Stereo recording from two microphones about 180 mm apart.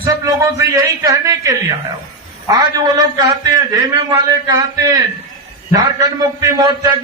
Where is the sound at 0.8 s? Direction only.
20° right (ahead or behind).